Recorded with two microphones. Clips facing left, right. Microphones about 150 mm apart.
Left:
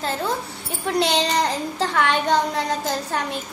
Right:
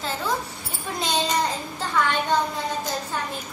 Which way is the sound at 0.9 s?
70° left (ahead or behind).